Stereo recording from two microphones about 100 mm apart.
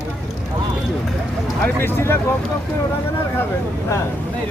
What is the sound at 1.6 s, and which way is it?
Speech, 20° left (ahead or behind).